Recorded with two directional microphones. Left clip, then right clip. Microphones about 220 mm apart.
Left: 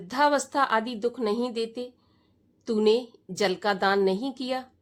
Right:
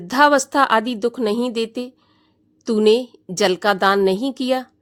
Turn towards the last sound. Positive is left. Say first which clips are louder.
# right 10 dB
turn(degrees=-30)  # may be behind; listen again after turning